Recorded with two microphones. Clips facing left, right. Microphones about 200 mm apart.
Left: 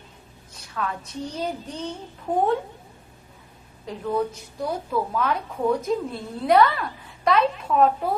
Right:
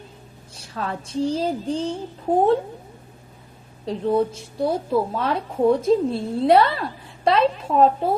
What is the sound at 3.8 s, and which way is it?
A woman's voice, 30° right (ahead or behind).